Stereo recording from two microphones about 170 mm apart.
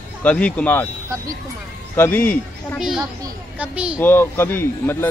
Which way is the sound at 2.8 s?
Centre (ahead or behind).